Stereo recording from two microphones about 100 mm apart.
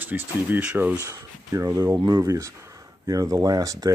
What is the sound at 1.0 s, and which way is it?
Speech, 35° right (ahead or behind).